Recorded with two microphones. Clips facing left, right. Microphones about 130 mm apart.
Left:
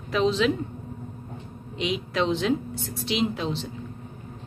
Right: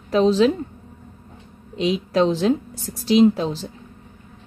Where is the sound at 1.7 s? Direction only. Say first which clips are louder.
Right 7 dB; 35° right (ahead or behind).